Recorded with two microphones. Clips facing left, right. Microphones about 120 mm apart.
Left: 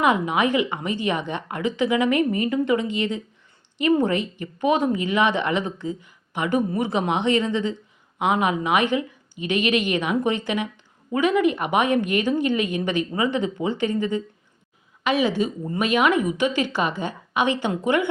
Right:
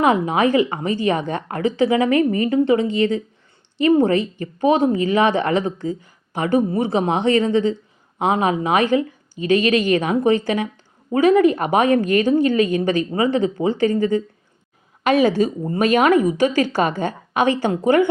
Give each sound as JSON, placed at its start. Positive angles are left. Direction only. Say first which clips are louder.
{"t": 0.0, "sound": "speech", "louder": "right 4 dB", "side_deg": -35}